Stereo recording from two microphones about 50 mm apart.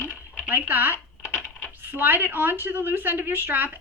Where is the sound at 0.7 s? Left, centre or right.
Right.